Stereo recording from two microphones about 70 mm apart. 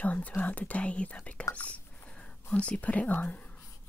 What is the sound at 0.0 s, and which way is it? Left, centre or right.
Speech, left.